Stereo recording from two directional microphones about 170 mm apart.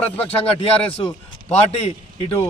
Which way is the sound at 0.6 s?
35° left (ahead or behind).